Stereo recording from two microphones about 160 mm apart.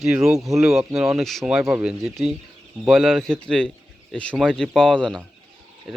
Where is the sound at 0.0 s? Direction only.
5° right (ahead or behind).